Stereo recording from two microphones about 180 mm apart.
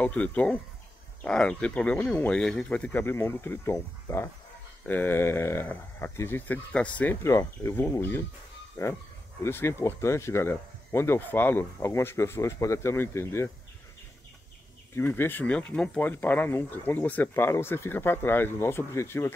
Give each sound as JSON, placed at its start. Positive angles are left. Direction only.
{"t": 0.0, "sound": "speech", "side_deg": 10}
{"t": 15.0, "sound": "speech", "side_deg": 10}